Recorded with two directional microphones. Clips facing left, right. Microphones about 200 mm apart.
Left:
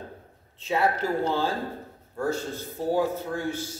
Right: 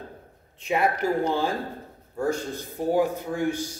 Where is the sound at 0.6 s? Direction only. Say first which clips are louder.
Right 1 dB; 15° right (ahead or behind).